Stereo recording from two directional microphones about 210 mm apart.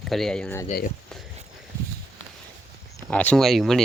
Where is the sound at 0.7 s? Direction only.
40° left (ahead or behind).